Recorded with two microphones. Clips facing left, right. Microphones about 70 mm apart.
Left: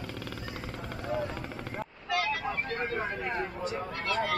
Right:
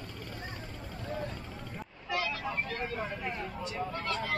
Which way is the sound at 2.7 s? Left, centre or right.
Left.